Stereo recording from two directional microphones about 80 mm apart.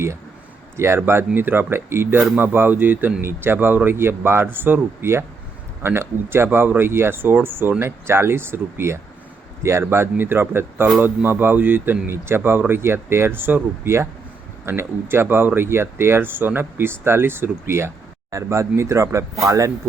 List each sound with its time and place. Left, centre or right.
0.8 s a man's voice: right